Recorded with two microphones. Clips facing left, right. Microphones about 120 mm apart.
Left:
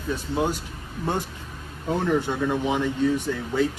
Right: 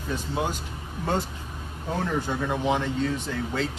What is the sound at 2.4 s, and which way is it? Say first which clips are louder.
Speech: left 2 dB; 10° right (ahead or behind).